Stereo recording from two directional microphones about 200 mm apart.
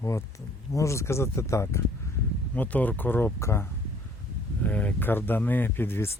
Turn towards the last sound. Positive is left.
turn(degrees=10)  # may be behind; listen again after turning